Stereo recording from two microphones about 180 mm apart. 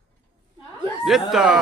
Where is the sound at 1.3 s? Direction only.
5° right (ahead or behind).